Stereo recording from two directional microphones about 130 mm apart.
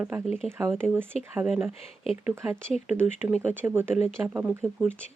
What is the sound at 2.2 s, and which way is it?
Speech, 20° right (ahead or behind).